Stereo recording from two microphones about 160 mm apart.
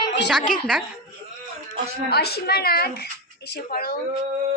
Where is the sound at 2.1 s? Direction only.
85° left.